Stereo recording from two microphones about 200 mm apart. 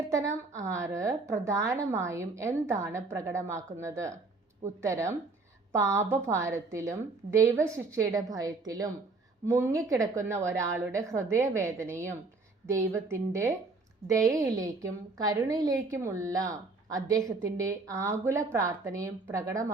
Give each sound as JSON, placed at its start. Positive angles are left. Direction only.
{"t": 0.1, "sound": "a woman's voice", "side_deg": -15}